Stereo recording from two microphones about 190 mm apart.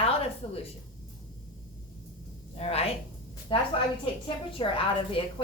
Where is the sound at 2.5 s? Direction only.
35° left (ahead or behind).